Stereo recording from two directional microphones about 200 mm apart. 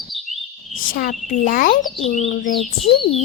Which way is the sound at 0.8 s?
45° left (ahead or behind).